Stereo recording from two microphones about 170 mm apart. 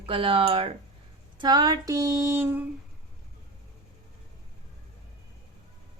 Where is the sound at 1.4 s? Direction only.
25° right (ahead or behind).